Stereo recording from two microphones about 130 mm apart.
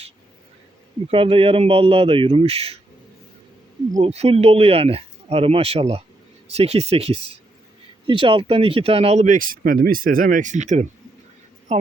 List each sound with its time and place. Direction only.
1.0 s speech: 45° right (ahead or behind)
4.0 s a woman's voice: 50° right (ahead or behind)